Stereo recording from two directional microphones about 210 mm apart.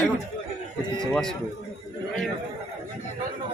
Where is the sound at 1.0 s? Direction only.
Centre (ahead or behind).